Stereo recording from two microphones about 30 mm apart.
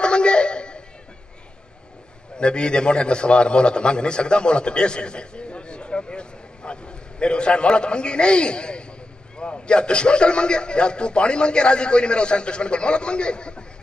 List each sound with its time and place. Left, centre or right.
0.0 s music: left
2.3 s a man's voice: left